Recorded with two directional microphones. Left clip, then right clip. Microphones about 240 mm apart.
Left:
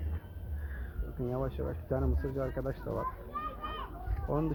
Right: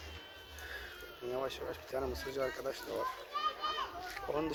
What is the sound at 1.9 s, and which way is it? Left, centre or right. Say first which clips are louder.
Speech: left 2 dB; centre.